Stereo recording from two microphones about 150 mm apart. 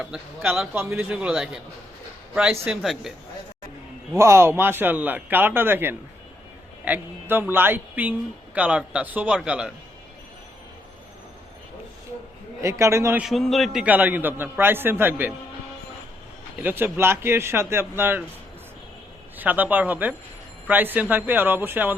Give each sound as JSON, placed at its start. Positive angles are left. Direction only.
{"t": 0.0, "sound": "a man's voice", "side_deg": -5}
{"t": 4.1, "sound": "a man's voice", "side_deg": -20}
{"t": 12.6, "sound": "a man's voice", "side_deg": -20}
{"t": 13.2, "sound": "speech", "side_deg": 0}
{"t": 13.8, "sound": "a man's voice", "side_deg": -10}
{"t": 16.6, "sound": "a man's voice", "side_deg": -10}
{"t": 19.4, "sound": "a man's voice", "side_deg": -10}